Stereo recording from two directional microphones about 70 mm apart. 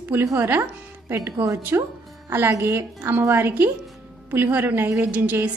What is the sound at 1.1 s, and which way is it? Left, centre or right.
A woman's voice, right.